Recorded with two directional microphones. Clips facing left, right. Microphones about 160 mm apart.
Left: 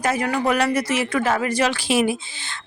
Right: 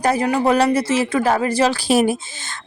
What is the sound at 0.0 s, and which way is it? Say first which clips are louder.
A woman's voice: right 4 dB; 35° right (ahead or behind).